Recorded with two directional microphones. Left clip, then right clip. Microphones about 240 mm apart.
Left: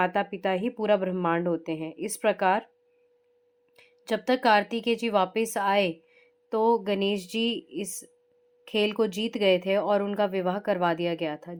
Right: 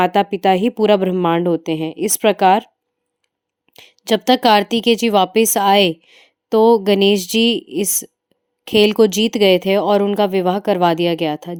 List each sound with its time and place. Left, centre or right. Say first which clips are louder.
0.0 s speech: right 12 dB; right
3.8 s speech: right 12 dB; right